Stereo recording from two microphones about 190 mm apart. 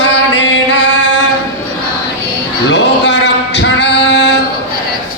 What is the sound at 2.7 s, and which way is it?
Male singing, 65° left (ahead or behind).